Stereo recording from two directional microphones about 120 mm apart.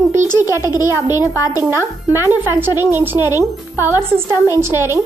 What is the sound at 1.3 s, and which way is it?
Speech, 30° left (ahead or behind).